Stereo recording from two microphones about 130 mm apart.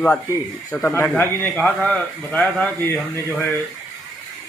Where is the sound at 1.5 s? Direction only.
5° left (ahead or behind).